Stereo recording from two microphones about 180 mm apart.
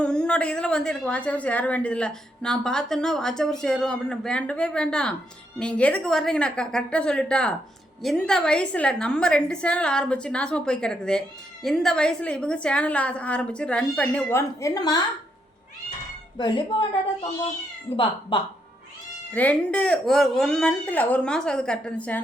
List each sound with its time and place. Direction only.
0.0 s a woman's voice: 5° left (ahead or behind)
16.4 s a woman's voice: 25° left (ahead or behind)
19.3 s a woman's voice: 10° left (ahead or behind)